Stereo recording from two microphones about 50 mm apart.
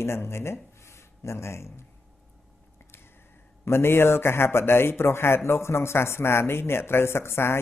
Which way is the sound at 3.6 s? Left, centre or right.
Left.